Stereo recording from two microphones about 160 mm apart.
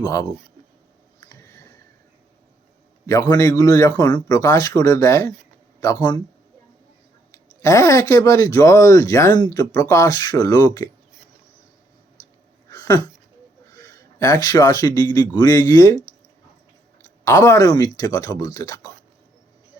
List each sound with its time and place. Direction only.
0.0 s a man's voice: 20° left (ahead or behind)
1.3 s a sound: 20° left (ahead or behind)
3.1 s a man's voice: 20° left (ahead or behind)
7.6 s a man's voice: 20° left (ahead or behind)
12.7 s a sound: 20° left (ahead or behind)
13.7 s a man's voice: 20° left (ahead or behind)
17.2 s a man's voice: 20° left (ahead or behind)